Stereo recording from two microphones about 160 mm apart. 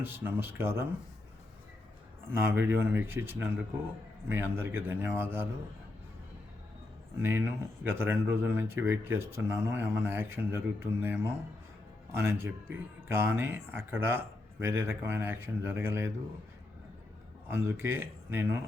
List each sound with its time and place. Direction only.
0.0 s speech: 15° right (ahead or behind)
2.4 s speech: 15° right (ahead or behind)
7.2 s speech: 15° right (ahead or behind)
17.5 s speech: 15° right (ahead or behind)